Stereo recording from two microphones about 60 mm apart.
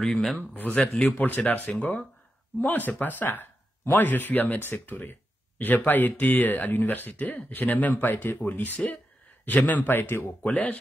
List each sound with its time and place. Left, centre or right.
0.0 s speech: centre
1.1 s speech: left